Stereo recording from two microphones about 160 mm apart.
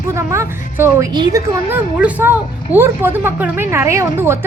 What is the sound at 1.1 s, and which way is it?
Speech, 25° right (ahead or behind).